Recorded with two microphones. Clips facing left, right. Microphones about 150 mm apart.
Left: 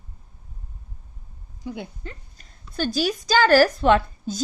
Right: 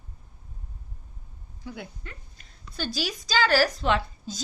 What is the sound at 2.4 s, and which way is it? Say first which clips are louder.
A woman's voice: left 7 dB; 50° left (ahead or behind).